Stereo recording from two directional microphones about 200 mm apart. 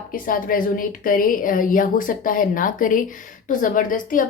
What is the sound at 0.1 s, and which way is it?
A woman's voice, 45° left (ahead or behind).